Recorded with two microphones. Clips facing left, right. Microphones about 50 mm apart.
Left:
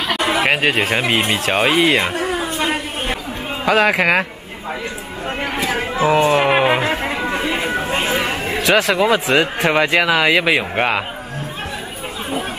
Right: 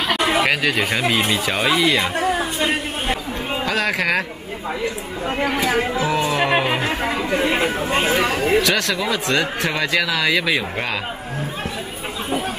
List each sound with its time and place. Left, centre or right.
0.5 s speech: left
3.6 s speech: centre
5.4 s speech: left
7.4 s speech: centre
8.3 s speech: left
9.7 s speech: left